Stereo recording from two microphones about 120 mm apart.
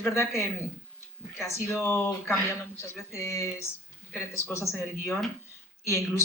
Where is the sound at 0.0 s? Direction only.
20° left (ahead or behind).